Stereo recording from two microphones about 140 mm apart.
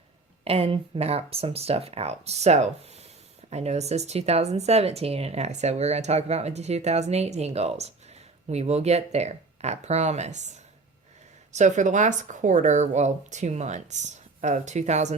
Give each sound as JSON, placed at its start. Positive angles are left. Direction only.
{"t": 0.4, "sound": "speech", "side_deg": -45}